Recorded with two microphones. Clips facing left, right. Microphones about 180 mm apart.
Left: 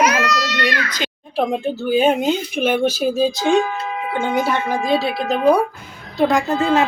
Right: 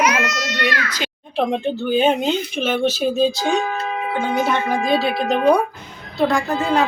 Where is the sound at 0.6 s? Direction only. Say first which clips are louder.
Left 1 dB; 5° right (ahead or behind).